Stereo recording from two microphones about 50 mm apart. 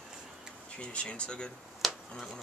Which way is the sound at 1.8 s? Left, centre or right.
Centre.